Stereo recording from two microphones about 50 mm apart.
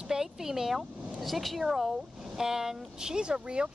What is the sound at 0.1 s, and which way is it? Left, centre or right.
Speech, centre.